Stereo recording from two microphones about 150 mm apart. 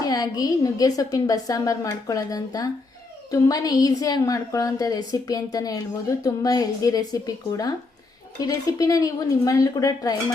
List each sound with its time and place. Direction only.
0.0 s a woman's voice: 25° left (ahead or behind)